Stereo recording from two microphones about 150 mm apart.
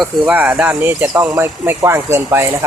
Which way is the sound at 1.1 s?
25° right (ahead or behind).